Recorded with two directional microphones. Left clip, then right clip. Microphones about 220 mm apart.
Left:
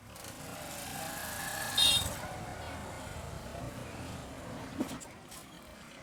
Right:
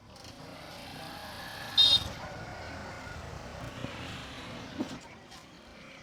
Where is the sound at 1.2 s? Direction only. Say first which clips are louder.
Left 4 dB; 50° left (ahead or behind).